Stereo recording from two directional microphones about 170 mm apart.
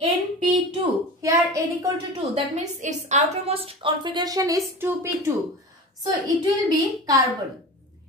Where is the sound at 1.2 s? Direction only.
20° right (ahead or behind).